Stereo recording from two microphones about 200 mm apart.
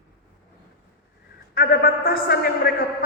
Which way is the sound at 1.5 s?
50° left (ahead or behind).